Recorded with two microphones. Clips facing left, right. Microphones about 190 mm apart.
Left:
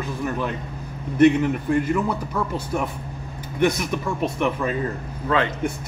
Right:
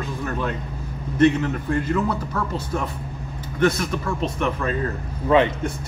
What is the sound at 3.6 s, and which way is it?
A man's voice, 15° left (ahead or behind).